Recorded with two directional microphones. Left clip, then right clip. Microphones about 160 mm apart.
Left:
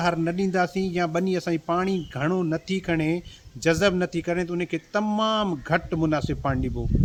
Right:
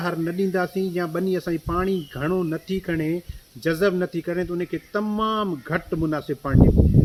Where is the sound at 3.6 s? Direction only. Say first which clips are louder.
Even; 25° left (ahead or behind).